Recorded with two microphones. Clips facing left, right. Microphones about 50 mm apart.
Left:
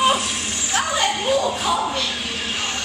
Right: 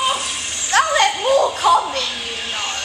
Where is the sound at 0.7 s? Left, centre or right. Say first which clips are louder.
Right 7 dB; right.